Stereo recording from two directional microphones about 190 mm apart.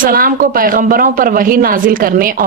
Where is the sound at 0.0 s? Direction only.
50° right (ahead or behind).